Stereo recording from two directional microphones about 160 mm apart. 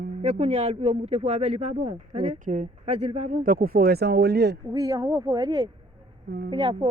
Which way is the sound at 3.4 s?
60° right (ahead or behind).